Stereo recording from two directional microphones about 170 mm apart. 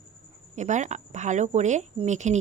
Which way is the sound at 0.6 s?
45° right (ahead or behind).